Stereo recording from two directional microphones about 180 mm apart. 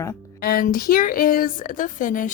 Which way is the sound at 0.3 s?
55° left (ahead or behind).